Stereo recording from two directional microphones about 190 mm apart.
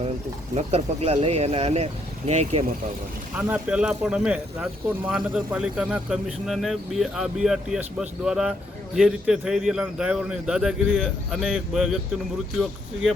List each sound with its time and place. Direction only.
0.5 s speech: 35° right (ahead or behind)
3.3 s speech: 10° right (ahead or behind)